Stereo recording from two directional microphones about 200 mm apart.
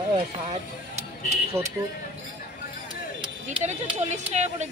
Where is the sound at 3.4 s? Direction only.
35° right (ahead or behind).